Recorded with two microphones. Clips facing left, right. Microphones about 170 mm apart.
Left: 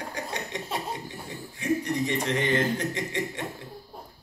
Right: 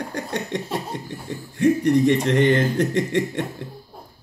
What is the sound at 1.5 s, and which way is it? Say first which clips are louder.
Speech: right 10 dB; 60° right (ahead or behind).